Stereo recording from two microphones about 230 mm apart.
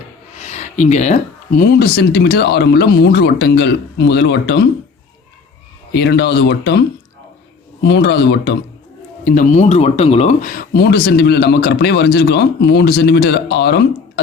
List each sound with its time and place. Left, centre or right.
0.3 s speech: left
5.9 s speech: left
7.9 s speech: left
9.2 s speech: left